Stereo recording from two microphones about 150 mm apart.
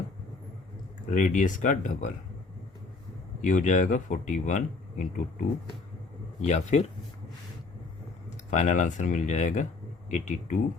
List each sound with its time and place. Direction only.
1.1 s speech: 55° left (ahead or behind)
3.4 s speech: 60° left (ahead or behind)
8.4 s speech: 60° left (ahead or behind)